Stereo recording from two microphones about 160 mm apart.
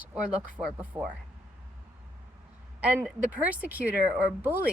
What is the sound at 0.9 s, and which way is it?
Speech, 20° right (ahead or behind).